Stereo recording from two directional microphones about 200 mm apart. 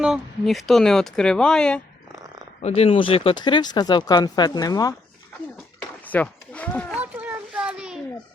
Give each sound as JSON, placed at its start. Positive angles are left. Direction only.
{"t": 0.0, "sound": "speech", "side_deg": 0}
{"t": 2.6, "sound": "speech", "side_deg": 30}
{"t": 6.1, "sound": "speech", "side_deg": 5}
{"t": 6.9, "sound": "a sound", "side_deg": -5}